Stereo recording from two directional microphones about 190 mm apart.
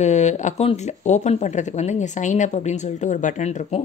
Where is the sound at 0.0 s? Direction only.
35° left (ahead or behind).